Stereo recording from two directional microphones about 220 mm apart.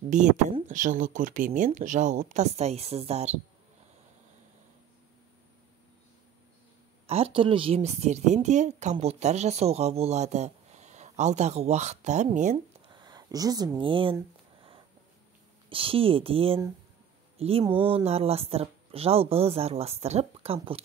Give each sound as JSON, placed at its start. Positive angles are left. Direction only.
{"t": 0.1, "sound": "a woman's voice", "side_deg": -35}
{"t": 7.1, "sound": "a woman's voice", "side_deg": -25}
{"t": 12.9, "sound": "speech", "side_deg": -20}
{"t": 15.7, "sound": "speech", "side_deg": -25}